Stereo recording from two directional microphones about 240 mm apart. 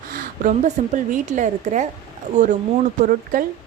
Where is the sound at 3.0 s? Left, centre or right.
Right.